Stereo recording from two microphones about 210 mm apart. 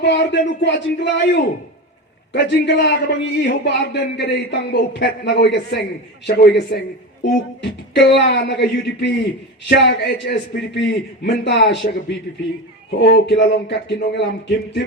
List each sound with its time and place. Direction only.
0.0 s a man's voice: 55° left (ahead or behind)